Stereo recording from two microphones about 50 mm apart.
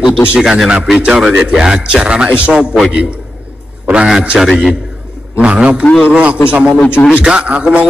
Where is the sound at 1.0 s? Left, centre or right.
Centre.